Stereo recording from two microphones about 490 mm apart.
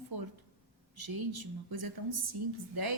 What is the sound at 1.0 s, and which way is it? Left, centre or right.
Speech, right.